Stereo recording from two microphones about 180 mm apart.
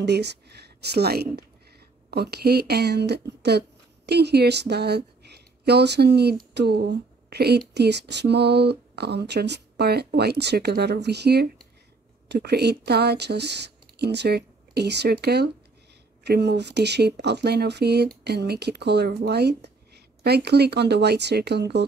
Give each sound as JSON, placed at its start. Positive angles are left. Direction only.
{"t": 0.0, "sound": "speech", "side_deg": -70}